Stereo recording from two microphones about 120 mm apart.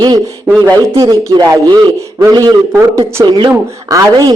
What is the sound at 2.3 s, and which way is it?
A man's voice, 40° right (ahead or behind).